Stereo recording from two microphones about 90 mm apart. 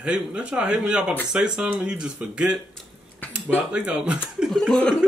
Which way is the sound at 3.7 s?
10° right (ahead or behind).